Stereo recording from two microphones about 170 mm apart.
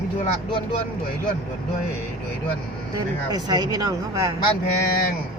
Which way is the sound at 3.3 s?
25° right (ahead or behind).